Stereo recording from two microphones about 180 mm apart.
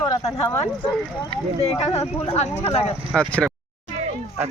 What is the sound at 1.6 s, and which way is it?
Speech, 35° left (ahead or behind).